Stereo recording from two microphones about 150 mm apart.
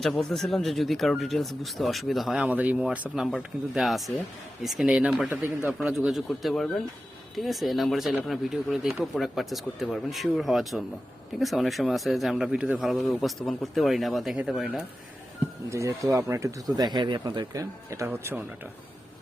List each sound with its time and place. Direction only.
0.0 s speech: centre (ahead or behind)
15.7 s speech: 20° right (ahead or behind)